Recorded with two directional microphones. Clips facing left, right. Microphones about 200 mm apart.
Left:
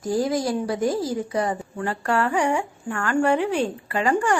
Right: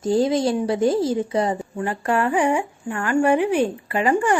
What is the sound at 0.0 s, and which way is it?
Speech, 25° right (ahead or behind).